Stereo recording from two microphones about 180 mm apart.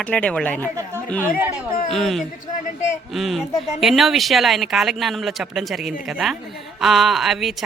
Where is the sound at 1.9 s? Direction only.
Centre (ahead or behind).